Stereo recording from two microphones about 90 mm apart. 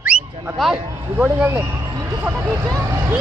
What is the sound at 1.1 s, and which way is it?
Speech, 15° right (ahead or behind).